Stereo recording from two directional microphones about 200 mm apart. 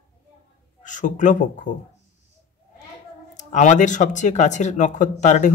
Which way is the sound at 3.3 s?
35° left (ahead or behind).